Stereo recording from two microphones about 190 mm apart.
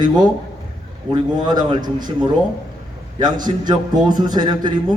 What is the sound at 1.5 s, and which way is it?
Speech, 20° right (ahead or behind).